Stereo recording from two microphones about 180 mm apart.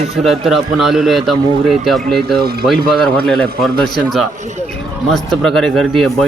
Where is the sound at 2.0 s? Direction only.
65° right (ahead or behind).